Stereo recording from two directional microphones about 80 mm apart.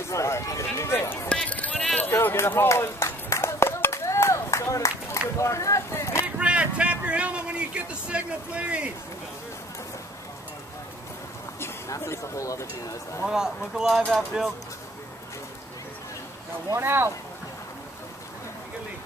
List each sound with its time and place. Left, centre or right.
0.1 s speech: left
0.7 s music: left
1.3 s a sound: centre
2.0 s run: left
5.4 s a sound: left
6.2 s speech: centre
11.6 s speech: left
13.3 s speech: centre
16.7 s speech: right